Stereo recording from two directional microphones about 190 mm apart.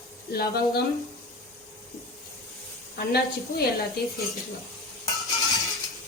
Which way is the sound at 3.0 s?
55° left (ahead or behind).